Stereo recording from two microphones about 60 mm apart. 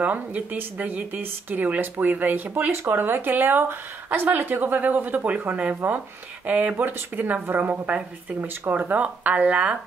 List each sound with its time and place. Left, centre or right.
0.0 s speech: right
6.8 s speech: right